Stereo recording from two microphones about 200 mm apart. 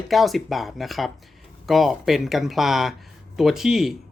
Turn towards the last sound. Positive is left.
turn(degrees=0)  # may be behind; listen again after turning